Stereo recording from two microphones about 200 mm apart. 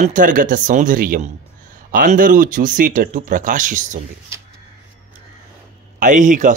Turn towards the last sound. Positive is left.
turn(degrees=-40)  # may be behind; listen again after turning